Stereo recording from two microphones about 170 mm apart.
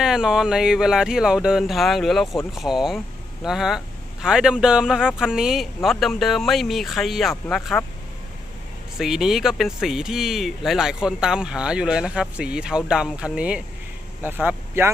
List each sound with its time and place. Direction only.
0.0 s speech: 5° right (ahead or behind)
9.0 s speech: centre (ahead or behind)